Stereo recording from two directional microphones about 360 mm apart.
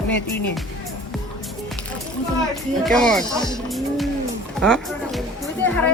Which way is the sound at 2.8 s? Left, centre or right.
Centre.